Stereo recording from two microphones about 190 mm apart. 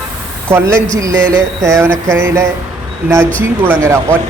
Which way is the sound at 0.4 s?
15° right (ahead or behind).